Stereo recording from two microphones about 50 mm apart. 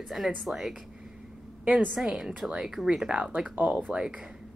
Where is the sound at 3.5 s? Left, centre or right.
Right.